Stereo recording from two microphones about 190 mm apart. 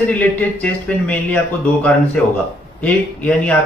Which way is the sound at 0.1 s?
10° left (ahead or behind).